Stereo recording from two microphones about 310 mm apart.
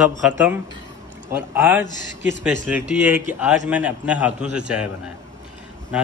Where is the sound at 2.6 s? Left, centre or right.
Centre.